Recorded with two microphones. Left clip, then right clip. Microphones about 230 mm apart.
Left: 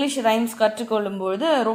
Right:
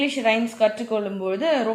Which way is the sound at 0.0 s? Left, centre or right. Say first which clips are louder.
Even; left.